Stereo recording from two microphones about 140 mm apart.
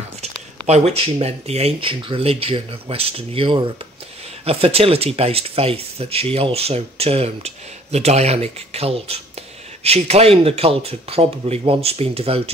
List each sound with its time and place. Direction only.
0.2 s speech: 50° right (ahead or behind)